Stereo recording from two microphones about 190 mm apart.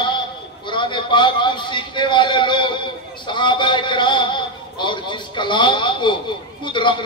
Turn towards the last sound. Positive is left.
turn(degrees=25)  # may be behind; listen again after turning